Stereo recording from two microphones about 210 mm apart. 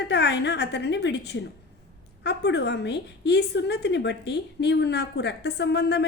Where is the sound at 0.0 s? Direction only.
55° left (ahead or behind).